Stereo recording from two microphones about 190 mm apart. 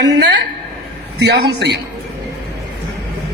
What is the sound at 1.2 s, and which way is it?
Speech, 60° right (ahead or behind).